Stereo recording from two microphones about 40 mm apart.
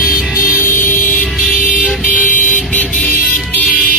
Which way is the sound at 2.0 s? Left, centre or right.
Left.